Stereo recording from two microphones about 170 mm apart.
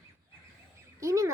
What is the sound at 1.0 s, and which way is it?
Speech, 20° right (ahead or behind).